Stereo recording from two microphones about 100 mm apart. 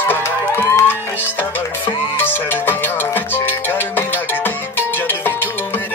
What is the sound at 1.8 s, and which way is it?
Music, 20° left (ahead or behind).